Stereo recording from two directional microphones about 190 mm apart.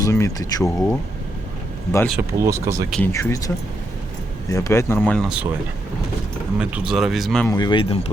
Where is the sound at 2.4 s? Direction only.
15° right (ahead or behind).